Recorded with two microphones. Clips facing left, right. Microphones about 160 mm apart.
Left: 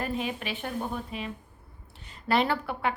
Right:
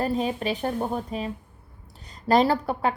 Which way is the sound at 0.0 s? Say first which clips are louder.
Right 6 dB; 35° right (ahead or behind).